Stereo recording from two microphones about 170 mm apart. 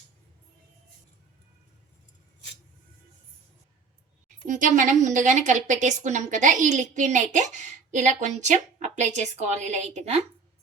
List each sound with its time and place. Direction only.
4.4 s a woman's voice: 50° right (ahead or behind)